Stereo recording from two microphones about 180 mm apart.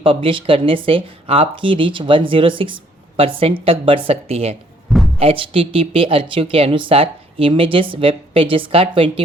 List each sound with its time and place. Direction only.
0.0 s speech: 30° right (ahead or behind)
4.9 s a sound: centre (ahead or behind)
5.2 s speech: 30° right (ahead or behind)